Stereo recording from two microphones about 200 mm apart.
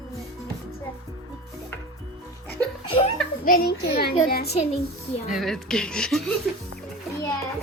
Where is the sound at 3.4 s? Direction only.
50° left (ahead or behind).